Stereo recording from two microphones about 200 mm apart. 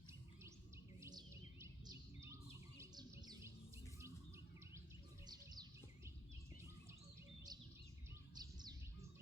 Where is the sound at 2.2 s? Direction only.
15° right (ahead or behind).